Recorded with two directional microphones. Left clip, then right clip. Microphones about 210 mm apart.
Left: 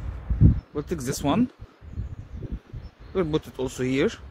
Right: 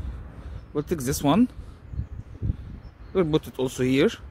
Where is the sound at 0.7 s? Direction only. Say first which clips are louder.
Right 2 dB; 40° right (ahead or behind).